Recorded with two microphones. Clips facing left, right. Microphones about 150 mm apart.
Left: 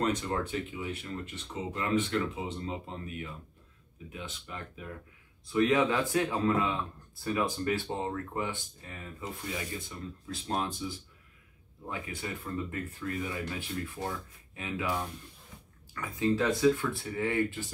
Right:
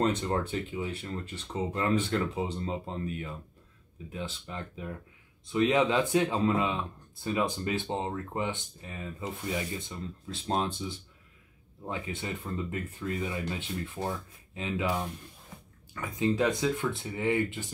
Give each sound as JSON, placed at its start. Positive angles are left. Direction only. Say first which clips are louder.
{"t": 0.0, "sound": "speech", "louder": "right 2 dB", "side_deg": -30}